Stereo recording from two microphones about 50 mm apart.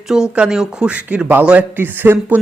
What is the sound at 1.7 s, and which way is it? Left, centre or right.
Speech, right.